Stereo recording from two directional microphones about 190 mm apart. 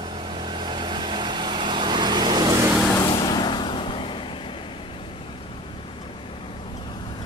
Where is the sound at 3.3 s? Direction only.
25° left (ahead or behind).